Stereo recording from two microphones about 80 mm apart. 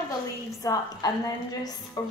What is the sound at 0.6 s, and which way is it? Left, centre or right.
A woman's voice, left.